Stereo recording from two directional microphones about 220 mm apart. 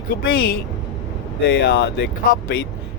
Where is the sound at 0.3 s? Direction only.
45° left (ahead or behind).